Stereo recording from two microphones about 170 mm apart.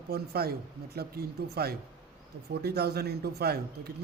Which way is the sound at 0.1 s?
65° right (ahead or behind).